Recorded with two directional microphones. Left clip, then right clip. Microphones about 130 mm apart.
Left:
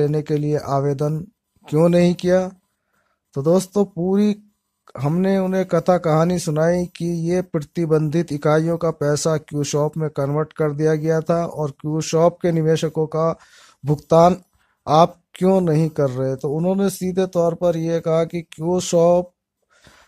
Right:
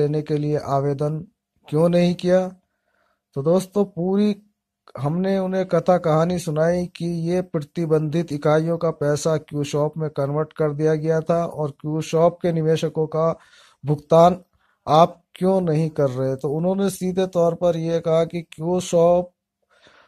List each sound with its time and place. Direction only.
0.0 s speech: 40° left (ahead or behind)
19.8 s gasp: 35° left (ahead or behind)